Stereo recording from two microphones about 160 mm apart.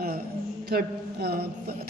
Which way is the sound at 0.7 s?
80° right.